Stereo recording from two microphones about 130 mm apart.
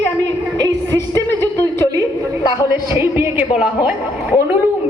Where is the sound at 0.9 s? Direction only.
20° left (ahead or behind).